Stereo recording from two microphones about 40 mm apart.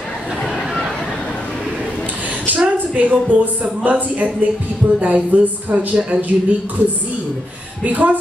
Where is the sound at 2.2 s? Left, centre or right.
Right.